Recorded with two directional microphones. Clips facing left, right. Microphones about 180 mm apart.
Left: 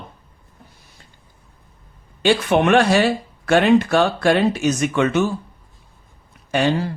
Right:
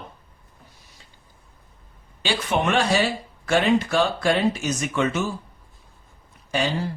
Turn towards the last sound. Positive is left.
turn(degrees=60)  # may be behind; listen again after turning